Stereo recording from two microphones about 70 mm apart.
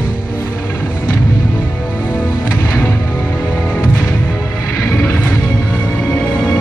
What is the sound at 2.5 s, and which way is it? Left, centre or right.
Music, left.